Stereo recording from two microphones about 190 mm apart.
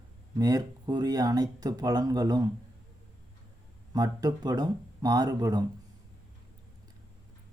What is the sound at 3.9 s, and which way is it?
Speech, 20° right (ahead or behind).